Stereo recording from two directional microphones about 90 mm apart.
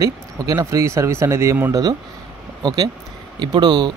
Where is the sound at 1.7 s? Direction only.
45° right (ahead or behind).